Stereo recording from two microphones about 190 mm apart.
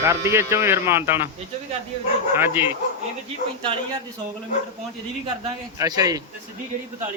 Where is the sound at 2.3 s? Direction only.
10° right (ahead or behind).